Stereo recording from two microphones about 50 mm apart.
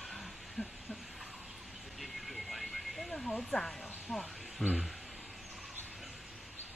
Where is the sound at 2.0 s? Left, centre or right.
Centre.